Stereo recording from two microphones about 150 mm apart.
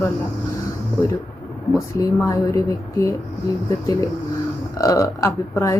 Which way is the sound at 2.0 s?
20° left (ahead or behind).